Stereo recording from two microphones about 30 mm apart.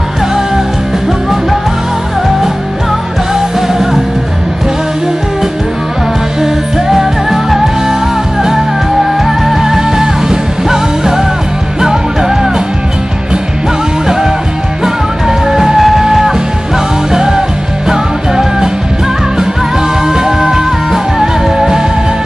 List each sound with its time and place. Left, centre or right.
3.3 s music: centre
6.4 s music: centre
9.0 s music: centre
15.2 s music: centre
20.1 s music: right